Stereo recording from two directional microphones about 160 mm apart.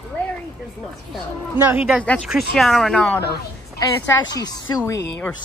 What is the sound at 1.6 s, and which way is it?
Speech, 10° right (ahead or behind).